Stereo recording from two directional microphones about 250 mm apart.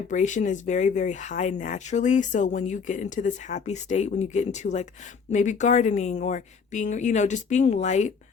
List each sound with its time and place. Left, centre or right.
0.1 s speech: left